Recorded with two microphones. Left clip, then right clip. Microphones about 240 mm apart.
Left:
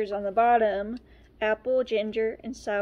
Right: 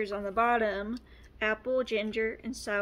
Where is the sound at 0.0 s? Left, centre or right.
Centre.